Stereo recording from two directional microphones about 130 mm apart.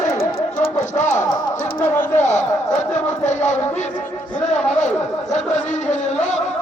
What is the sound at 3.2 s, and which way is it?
Music, 65° left (ahead or behind).